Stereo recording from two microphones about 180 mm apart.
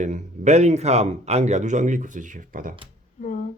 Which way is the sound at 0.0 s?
40° right (ahead or behind).